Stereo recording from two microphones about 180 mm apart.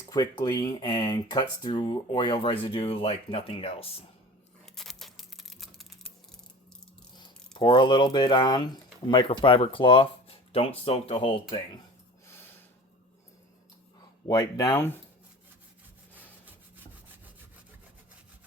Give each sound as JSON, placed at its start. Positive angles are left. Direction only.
{"t": 0.1, "sound": "speech", "side_deg": 20}
{"t": 4.6, "sound": "tearing", "side_deg": 0}
{"t": 7.2, "sound": "speech", "side_deg": 25}
{"t": 14.3, "sound": "speech", "side_deg": 20}
{"t": 16.5, "sound": "rub", "side_deg": -10}